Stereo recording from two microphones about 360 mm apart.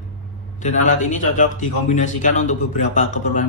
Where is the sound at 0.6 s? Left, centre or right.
Left.